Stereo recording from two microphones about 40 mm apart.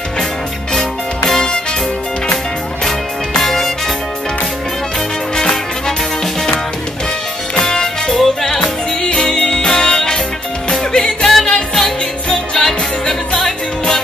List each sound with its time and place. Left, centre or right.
1.3 s music: centre
3.3 s music: centre
5.3 s music: centre
7.6 s music: centre
8.5 s music: left
11.2 s music: centre